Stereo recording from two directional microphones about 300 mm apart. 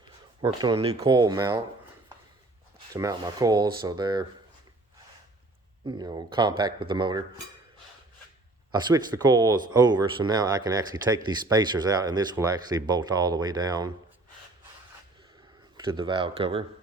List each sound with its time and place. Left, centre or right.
0.4 s speech: centre
2.9 s speech: centre
5.8 s speech: centre
8.7 s speech: centre
15.8 s speech: centre